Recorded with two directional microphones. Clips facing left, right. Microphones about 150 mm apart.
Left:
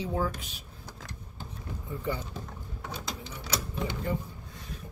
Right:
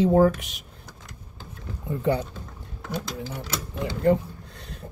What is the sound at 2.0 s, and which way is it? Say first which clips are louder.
Speech: right 10 dB; 65° right (ahead or behind).